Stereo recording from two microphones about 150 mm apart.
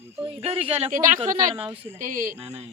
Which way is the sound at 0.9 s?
60° right (ahead or behind).